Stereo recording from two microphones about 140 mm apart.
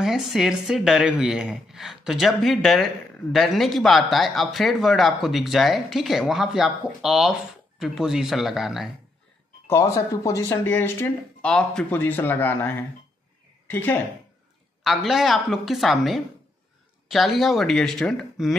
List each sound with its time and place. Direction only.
0.0 s speech: centre (ahead or behind)
9.7 s speech: 20° left (ahead or behind)
14.8 s speech: centre (ahead or behind)